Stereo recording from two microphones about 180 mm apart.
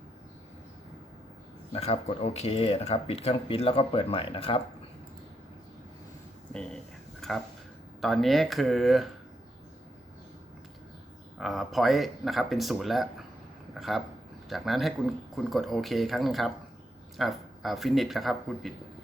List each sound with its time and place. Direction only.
1.7 s speech: 35° left (ahead or behind)
7.2 s a sound: 5° left (ahead or behind)
8.0 s speech: centre (ahead or behind)
11.3 s speech: centre (ahead or behind)